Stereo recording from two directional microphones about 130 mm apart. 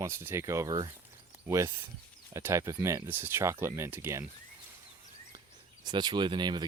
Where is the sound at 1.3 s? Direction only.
20° right (ahead or behind).